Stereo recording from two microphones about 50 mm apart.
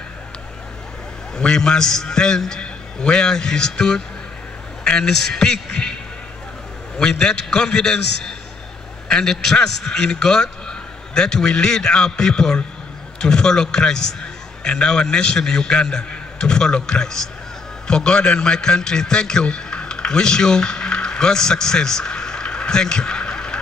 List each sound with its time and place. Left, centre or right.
1.3 s a man's voice: centre
7.0 s a man's voice: centre